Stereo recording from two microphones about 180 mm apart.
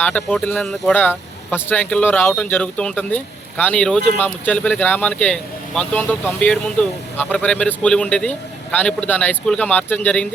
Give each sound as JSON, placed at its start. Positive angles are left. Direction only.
{"t": 0.0, "sound": "speech", "side_deg": 5}